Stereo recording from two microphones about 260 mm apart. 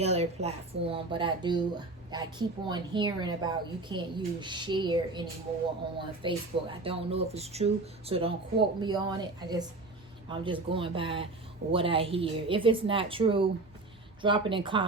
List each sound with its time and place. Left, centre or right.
0.0 s a woman's voice: right
6.2 s speech: right